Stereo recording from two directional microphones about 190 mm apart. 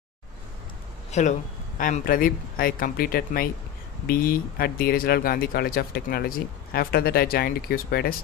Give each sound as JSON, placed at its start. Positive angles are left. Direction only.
{"t": 1.1, "sound": "speech", "side_deg": 35}